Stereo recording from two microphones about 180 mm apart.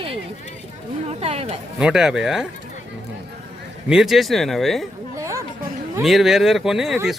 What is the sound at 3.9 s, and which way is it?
Speech, centre (ahead or behind).